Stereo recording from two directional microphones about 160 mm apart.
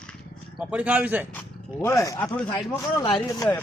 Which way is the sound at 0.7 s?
10° right (ahead or behind).